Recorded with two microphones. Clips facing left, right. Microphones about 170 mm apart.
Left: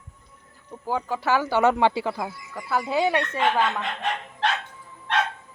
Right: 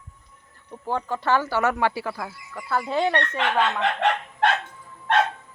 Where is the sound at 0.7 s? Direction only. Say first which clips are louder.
Even; 5° left (ahead or behind).